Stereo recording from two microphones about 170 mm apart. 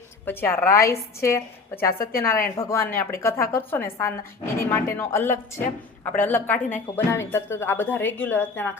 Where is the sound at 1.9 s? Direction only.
60° left (ahead or behind).